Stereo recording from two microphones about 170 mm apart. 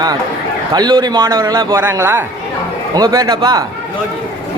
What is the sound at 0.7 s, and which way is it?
A man's voice, 25° right (ahead or behind).